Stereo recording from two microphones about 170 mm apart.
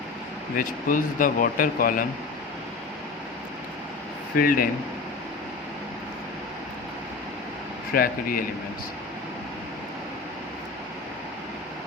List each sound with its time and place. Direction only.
0.5 s speech: 50° left (ahead or behind)
4.4 s speech: 55° left (ahead or behind)
7.9 s speech: 55° left (ahead or behind)